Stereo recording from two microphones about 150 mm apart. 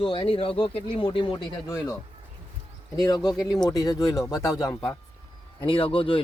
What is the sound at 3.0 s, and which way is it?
Speech, 30° left (ahead or behind).